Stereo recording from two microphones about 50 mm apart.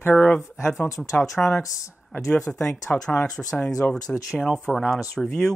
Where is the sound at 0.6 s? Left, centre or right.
Left.